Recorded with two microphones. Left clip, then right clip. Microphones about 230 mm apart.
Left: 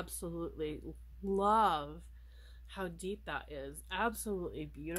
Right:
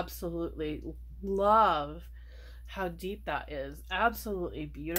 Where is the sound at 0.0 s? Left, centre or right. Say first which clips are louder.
Right 7 dB; left.